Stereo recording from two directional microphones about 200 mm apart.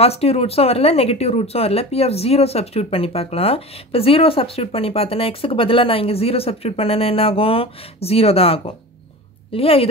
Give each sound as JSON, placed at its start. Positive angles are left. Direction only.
{"t": 0.0, "sound": "speech", "side_deg": 30}